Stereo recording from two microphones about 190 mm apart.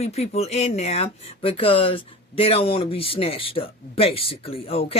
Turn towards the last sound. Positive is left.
turn(degrees=30)  # may be behind; listen again after turning